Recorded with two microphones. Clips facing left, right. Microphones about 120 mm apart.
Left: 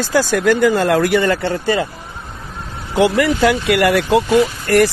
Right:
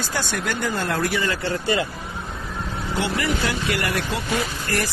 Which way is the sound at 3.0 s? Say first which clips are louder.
Left 11 dB; 90° left.